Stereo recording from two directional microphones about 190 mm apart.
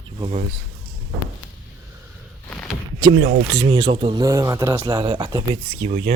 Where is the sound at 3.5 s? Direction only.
25° right (ahead or behind).